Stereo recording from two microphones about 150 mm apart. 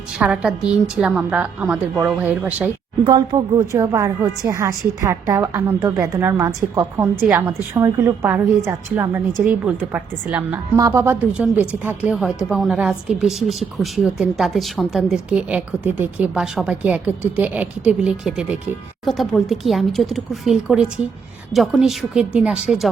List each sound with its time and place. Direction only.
0.2 s a woman's voice: 5° right (ahead or behind)
10.8 s a woman's voice: 20° right (ahead or behind); by 22.9 s 5° right (ahead or behind)